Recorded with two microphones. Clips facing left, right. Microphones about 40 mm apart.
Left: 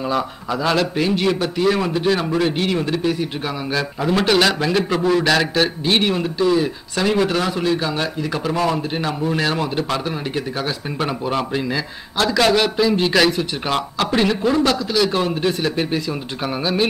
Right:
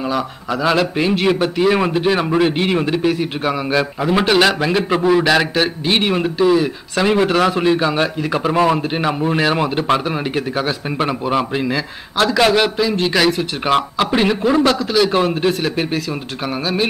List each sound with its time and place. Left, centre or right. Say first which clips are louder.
0.5 s speech: right 3 dB; centre
13.0 s speech: right 1 dB; centre
13.7 s speech: right 6 dB; centre